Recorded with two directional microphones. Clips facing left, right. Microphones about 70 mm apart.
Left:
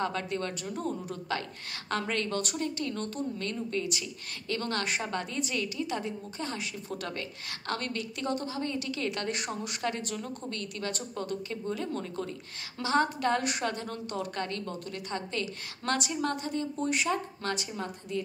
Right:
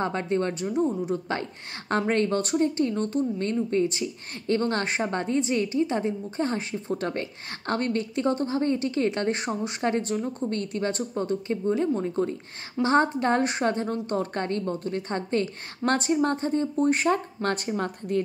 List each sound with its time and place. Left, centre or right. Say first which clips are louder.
0.0 s a woman's voice: right 6 dB; right